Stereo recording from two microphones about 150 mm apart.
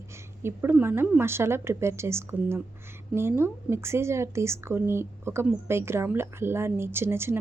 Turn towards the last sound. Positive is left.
turn(degrees=-15)  # may be behind; listen again after turning